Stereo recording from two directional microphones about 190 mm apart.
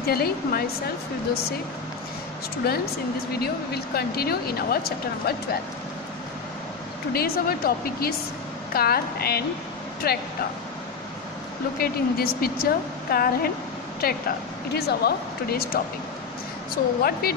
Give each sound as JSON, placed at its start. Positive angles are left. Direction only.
{"t": 0.0, "sound": "a woman's voice", "side_deg": 55}
{"t": 2.6, "sound": "speech", "side_deg": 55}
{"t": 7.1, "sound": "a woman's voice", "side_deg": 55}
{"t": 11.8, "sound": "a woman's voice", "side_deg": 55}